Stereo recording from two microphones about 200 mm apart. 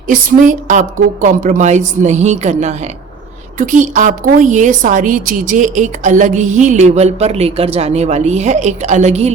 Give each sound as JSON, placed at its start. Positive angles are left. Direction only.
{"t": 0.1, "sound": "a woman's voice", "side_deg": -40}